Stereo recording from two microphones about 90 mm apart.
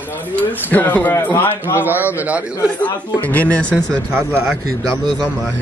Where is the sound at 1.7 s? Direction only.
20° right (ahead or behind).